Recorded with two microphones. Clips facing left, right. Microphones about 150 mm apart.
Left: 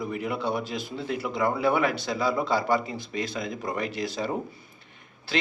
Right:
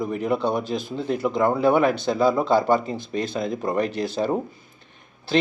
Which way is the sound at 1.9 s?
50° right (ahead or behind).